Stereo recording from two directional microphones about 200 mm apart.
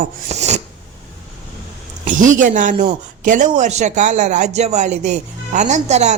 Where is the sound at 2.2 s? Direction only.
40° right (ahead or behind).